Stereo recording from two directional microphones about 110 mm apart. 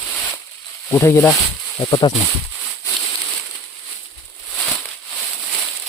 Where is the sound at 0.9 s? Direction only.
25° left (ahead or behind).